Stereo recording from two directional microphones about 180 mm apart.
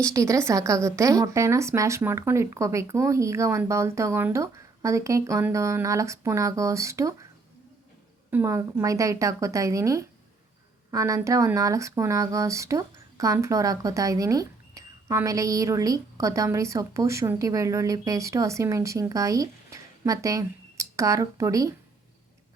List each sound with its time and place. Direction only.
0.0 s speech: 15° right (ahead or behind)
8.3 s speech: 15° right (ahead or behind)